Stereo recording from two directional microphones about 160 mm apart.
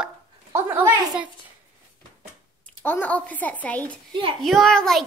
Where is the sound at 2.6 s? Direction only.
10° left (ahead or behind).